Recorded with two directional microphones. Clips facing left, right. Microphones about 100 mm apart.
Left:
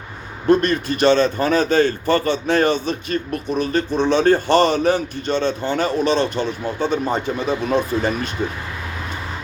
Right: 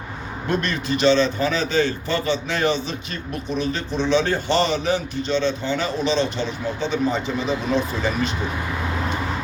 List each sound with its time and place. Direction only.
0.6 s a man's voice: 50° left (ahead or behind)